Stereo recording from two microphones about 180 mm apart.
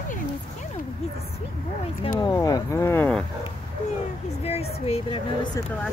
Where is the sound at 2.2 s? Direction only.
20° left (ahead or behind).